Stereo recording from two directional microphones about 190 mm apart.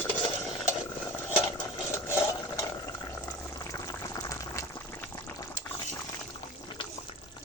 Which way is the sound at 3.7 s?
15° left (ahead or behind).